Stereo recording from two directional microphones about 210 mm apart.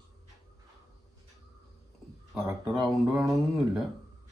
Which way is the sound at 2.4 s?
5° right (ahead or behind).